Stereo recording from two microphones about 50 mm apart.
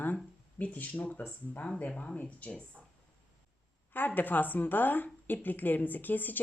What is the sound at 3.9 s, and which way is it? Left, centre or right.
Speech, left.